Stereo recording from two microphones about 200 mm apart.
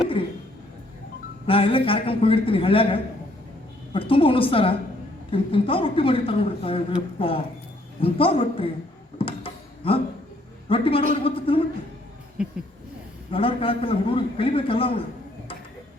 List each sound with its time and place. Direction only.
1.5 s a woman's voice: 25° left (ahead or behind)
9.1 s a sound: 25° left (ahead or behind)
10.7 s a woman's voice: 25° left (ahead or behind)
13.3 s a woman's voice: 25° left (ahead or behind)